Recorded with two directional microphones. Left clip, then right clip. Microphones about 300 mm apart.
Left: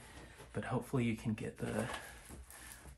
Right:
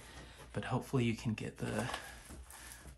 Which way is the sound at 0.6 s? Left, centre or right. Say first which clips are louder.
Right 1 dB; centre.